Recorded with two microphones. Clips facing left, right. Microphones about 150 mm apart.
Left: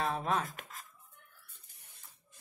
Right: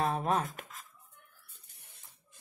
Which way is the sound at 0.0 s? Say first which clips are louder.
Right 3 dB; 45° right (ahead or behind).